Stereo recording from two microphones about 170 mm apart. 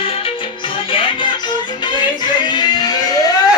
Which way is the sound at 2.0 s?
25° left (ahead or behind).